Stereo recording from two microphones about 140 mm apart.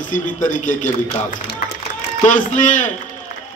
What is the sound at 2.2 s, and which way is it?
Speech, 65° left (ahead or behind).